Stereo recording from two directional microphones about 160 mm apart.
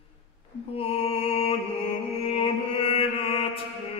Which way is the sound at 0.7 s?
35° left (ahead or behind).